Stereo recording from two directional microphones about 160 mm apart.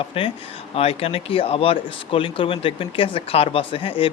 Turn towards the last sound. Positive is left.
turn(degrees=35)  # may be behind; listen again after turning